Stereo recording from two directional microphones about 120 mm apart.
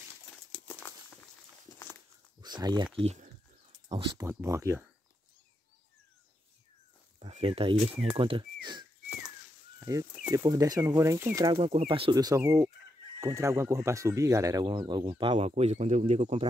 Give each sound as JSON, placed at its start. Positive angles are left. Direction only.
{"t": 0.5, "sound": "a sound", "side_deg": 15}
{"t": 2.4, "sound": "a sound", "side_deg": -35}
{"t": 3.0, "sound": "speech", "side_deg": -65}
{"t": 3.9, "sound": "speech", "side_deg": -50}
{"t": 4.2, "sound": "speech", "side_deg": -25}
{"t": 7.2, "sound": "speech", "side_deg": -55}
{"t": 9.8, "sound": "a sound", "side_deg": -30}
{"t": 10.3, "sound": "speech", "side_deg": -30}
{"t": 11.5, "sound": "speech", "side_deg": -60}
{"t": 15.3, "sound": "speech", "side_deg": -60}